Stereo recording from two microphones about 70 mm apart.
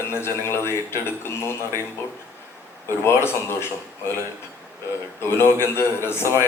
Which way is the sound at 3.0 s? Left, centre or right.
Left.